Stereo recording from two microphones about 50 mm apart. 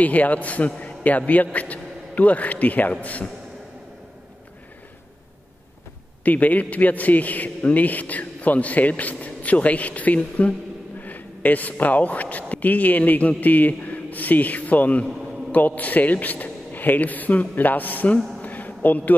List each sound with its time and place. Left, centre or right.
0.0 s a man's voice: left
6.2 s a man's voice: left
18.4 s a sound: left